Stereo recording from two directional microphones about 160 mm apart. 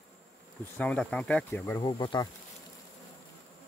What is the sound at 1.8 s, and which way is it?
Insect, 30° left (ahead or behind).